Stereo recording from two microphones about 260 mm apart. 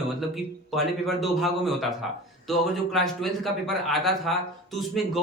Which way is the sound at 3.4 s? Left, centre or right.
Centre.